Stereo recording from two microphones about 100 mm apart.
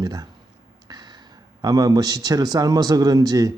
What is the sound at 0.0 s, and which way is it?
Speech, 40° right (ahead or behind).